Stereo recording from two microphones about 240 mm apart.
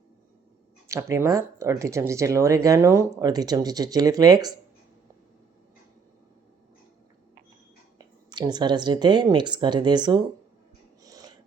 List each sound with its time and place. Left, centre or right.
0.9 s speech: centre
7.9 s speech: centre
11.0 s a sound: centre